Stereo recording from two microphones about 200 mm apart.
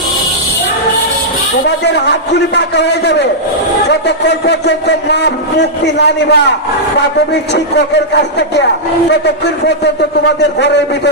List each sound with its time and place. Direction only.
2.6 s a man's voice: 60° left (ahead or behind)
7.5 s a man's voice: 60° left (ahead or behind)